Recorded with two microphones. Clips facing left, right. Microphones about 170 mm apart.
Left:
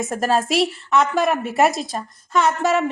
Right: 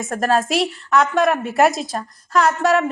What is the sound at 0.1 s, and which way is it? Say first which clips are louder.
A woman's voice: right 3 dB; centre (ahead or behind).